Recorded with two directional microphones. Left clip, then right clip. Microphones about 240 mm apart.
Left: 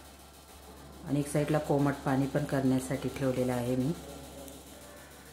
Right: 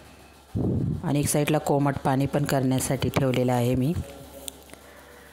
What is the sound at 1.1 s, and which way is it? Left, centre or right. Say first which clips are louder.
Speech: right 6 dB; right.